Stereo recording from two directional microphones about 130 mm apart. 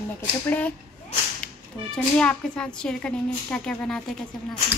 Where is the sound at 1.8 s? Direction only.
10° left (ahead or behind).